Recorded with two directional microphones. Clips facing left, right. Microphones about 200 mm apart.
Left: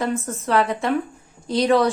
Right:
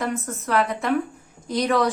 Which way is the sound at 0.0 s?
30° left (ahead or behind).